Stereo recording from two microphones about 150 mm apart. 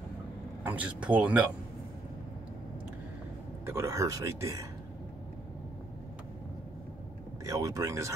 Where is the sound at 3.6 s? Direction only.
20° right (ahead or behind).